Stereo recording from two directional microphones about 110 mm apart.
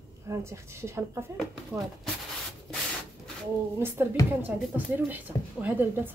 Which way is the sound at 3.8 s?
20° right (ahead or behind).